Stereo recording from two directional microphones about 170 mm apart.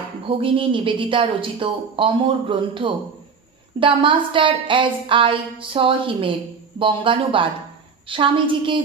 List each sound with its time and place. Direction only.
0.3 s a woman's voice: 30° right (ahead or behind)